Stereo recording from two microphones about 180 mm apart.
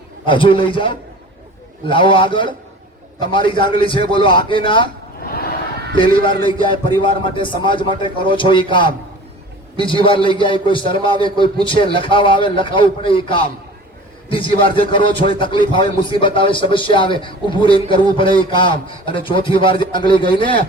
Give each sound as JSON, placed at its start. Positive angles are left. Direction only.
{"t": 0.3, "sound": "a man's voice", "side_deg": 30}
{"t": 5.2, "sound": "crowd", "side_deg": 55}
{"t": 5.9, "sound": "a man's voice", "side_deg": 25}